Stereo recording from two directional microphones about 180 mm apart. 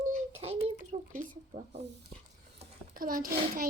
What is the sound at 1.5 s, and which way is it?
Speech, 35° right (ahead or behind).